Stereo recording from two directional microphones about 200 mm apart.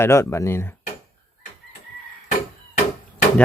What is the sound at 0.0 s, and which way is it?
Speech, 15° left (ahead or behind).